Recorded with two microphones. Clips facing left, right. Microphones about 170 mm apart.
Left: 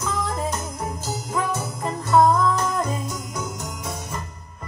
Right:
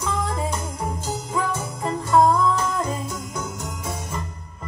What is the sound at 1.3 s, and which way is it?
Music, 5° left (ahead or behind).